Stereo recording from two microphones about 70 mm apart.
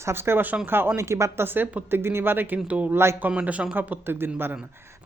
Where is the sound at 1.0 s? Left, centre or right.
Right.